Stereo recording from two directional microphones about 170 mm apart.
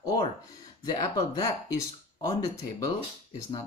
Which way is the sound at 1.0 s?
20° left (ahead or behind).